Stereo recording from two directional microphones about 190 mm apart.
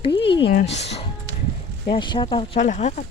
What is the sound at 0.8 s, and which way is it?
Speech, 35° left (ahead or behind).